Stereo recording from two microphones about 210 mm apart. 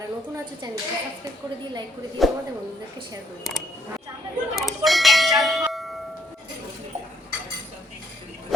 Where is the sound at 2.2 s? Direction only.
Centre (ahead or behind).